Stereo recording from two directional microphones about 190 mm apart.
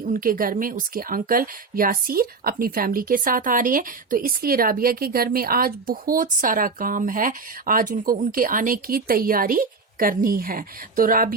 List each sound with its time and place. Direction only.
0.0 s speech: 45° right (ahead or behind)